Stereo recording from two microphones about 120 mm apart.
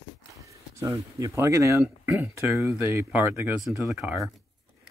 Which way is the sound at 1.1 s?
25° right (ahead or behind).